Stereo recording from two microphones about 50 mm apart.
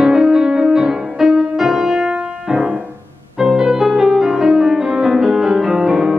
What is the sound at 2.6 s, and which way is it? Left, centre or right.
Music, right.